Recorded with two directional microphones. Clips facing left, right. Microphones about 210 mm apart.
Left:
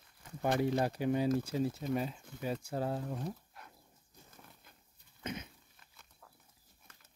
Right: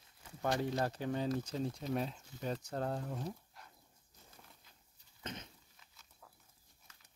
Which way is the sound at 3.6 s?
55° left (ahead or behind).